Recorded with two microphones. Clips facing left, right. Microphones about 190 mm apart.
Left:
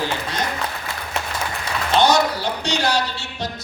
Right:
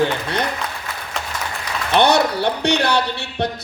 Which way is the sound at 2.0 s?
60° right (ahead or behind).